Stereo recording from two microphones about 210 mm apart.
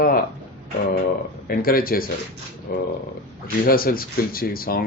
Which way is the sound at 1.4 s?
45° left (ahead or behind).